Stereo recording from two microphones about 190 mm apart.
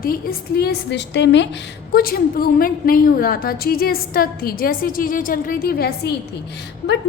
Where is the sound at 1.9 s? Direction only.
50° left (ahead or behind).